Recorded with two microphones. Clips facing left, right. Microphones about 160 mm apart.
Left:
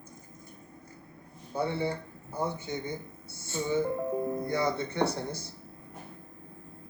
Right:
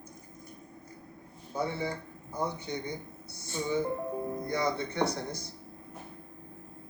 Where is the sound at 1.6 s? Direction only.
10° right (ahead or behind).